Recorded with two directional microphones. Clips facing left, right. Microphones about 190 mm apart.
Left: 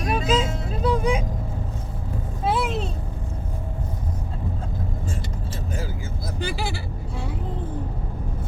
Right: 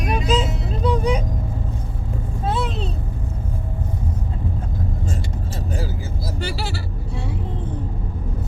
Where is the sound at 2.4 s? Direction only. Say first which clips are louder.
Left 1 dB; 10° left (ahead or behind).